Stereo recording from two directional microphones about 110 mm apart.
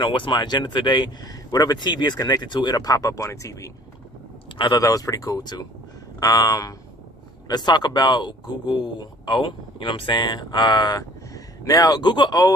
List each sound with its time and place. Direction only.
0.0 s speech: 45° left (ahead or behind); by 3.7 s 30° left (ahead or behind)
4.5 s speech: 40° left (ahead or behind)